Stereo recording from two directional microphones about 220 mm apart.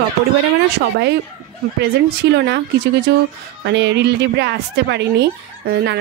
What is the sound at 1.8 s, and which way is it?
Speech, 50° right (ahead or behind).